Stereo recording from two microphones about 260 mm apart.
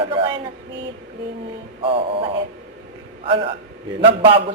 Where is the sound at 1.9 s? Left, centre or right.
Right.